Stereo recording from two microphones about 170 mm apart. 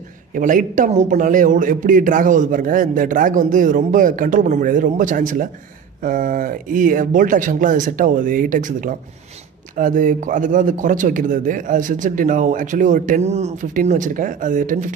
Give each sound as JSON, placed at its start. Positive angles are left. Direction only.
{"t": 0.3, "sound": "a man's voice", "side_deg": -50}